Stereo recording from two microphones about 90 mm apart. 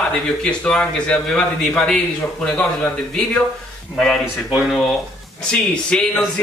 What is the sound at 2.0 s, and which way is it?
Speech, 15° left (ahead or behind).